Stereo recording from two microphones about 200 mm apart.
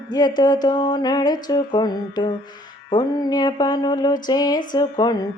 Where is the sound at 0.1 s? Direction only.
20° left (ahead or behind).